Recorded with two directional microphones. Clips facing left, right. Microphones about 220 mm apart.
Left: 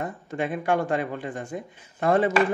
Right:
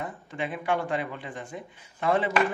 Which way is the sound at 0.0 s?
45° left (ahead or behind).